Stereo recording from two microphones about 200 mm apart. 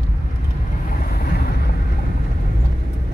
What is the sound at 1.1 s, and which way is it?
Vehicle, 50° left (ahead or behind).